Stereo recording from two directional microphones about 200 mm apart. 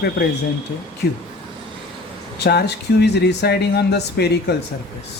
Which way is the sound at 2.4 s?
55° left (ahead or behind).